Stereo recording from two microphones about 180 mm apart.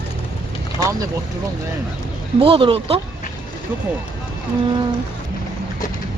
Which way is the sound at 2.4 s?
30° right (ahead or behind).